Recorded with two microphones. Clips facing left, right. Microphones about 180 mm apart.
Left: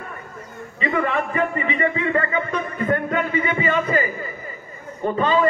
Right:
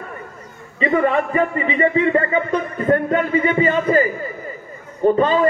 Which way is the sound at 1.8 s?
35° right (ahead or behind).